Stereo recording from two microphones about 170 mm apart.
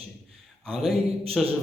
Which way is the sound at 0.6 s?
Centre (ahead or behind).